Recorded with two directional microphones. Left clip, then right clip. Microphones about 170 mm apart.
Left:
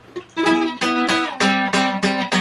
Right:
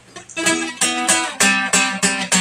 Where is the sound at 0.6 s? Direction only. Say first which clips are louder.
Left 1 dB; 25° left (ahead or behind).